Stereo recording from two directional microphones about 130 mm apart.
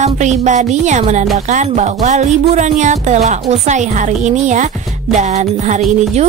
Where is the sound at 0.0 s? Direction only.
65° right (ahead or behind).